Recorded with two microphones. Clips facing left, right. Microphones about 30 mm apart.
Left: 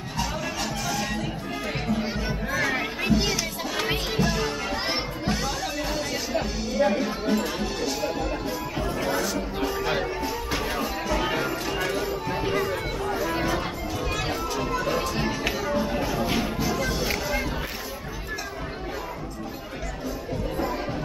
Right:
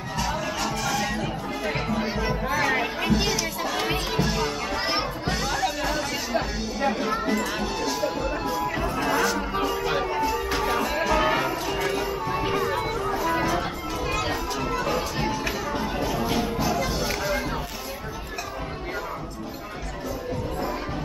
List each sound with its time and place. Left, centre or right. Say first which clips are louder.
0.2 s music: right 2 dB; centre
8.8 s music: right 2 dB; right
9.3 s music: right 2 dB; centre
11.1 s music: right 3 dB; centre
11.7 s a sound: right 1 dB; centre
12.7 s music: right 2 dB; centre